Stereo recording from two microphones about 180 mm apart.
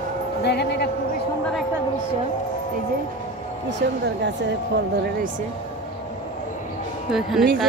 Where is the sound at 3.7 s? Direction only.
75° right (ahead or behind).